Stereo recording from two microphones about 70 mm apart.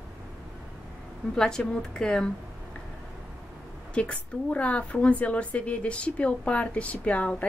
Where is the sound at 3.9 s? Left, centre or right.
Centre.